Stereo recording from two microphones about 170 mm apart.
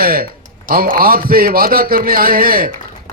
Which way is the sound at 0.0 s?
60° right (ahead or behind).